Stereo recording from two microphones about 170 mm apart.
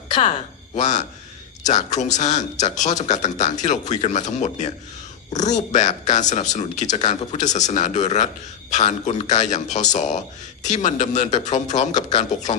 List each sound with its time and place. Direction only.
0.1 s speech: 45° left (ahead or behind)